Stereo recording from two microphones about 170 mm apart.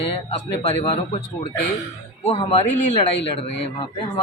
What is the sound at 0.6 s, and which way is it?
Speech, 35° left (ahead or behind).